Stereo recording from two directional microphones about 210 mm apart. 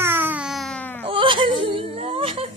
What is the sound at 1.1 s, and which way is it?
Wail, 25° right (ahead or behind).